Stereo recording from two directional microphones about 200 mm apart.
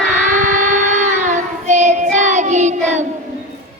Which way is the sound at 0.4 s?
40° right (ahead or behind).